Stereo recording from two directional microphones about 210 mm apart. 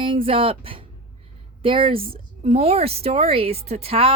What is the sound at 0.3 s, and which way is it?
A woman's voice, 25° right (ahead or behind).